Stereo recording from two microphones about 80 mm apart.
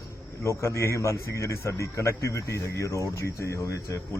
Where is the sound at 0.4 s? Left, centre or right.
Left.